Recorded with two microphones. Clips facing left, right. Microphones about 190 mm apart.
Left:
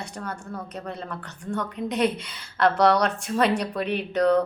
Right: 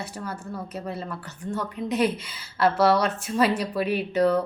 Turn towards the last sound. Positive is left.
turn(degrees=-5)  # may be behind; listen again after turning